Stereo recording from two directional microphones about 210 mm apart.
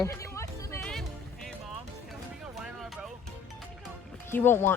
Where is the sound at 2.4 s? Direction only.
Centre (ahead or behind).